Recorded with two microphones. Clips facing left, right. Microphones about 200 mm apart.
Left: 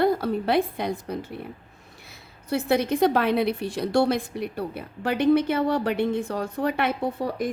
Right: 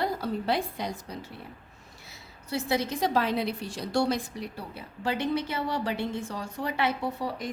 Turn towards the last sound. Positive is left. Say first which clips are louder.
# left 5 dB
turn(degrees=55)  # may be behind; listen again after turning